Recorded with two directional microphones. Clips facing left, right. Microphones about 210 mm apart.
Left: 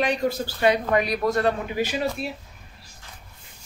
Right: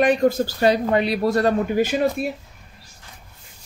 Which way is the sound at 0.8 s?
30° right (ahead or behind).